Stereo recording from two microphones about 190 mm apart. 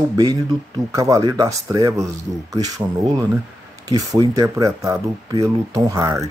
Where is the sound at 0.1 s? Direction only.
20° right (ahead or behind).